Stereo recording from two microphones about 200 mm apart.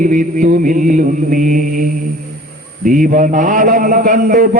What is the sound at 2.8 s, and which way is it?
A man's voice, 40° right (ahead or behind).